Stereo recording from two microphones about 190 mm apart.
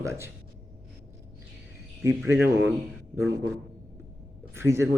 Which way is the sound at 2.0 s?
10° right (ahead or behind).